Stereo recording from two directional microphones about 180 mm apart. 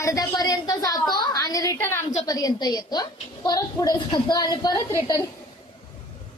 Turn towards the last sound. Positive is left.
turn(degrees=20)  # may be behind; listen again after turning